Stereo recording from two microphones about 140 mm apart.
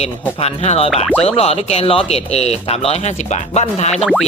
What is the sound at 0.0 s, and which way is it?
Speech, 50° left (ahead or behind).